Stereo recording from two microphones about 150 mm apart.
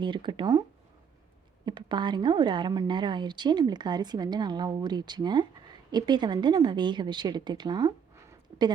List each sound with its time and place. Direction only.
0.0 s speech: 30° right (ahead or behind)
1.6 s a woman's voice: 30° right (ahead or behind)